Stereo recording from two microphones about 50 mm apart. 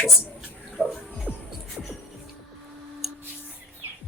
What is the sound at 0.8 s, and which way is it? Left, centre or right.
Music, centre.